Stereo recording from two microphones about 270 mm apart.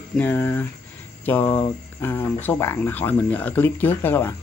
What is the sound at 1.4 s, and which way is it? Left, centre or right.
Cricket, left.